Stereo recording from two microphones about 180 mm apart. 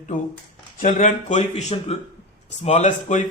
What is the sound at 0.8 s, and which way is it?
A man's voice, 45° left (ahead or behind).